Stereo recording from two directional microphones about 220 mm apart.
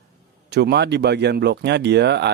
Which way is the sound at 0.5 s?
50° right (ahead or behind).